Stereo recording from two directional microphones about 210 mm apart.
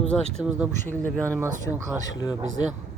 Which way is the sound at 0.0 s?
5° left (ahead or behind).